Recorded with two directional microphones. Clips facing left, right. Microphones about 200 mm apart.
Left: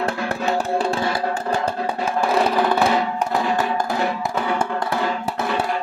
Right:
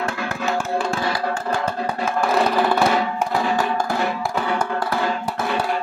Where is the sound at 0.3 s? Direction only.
30° left (ahead or behind).